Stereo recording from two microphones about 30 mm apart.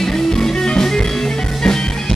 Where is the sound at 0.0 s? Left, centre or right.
Centre.